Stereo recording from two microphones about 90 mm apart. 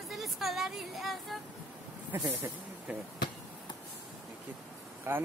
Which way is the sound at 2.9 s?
10° right (ahead or behind).